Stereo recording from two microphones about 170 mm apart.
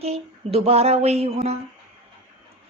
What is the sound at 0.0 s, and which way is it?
Speech, 35° right (ahead or behind).